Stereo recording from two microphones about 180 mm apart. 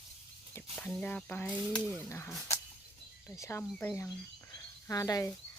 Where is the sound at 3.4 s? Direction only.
15° left (ahead or behind).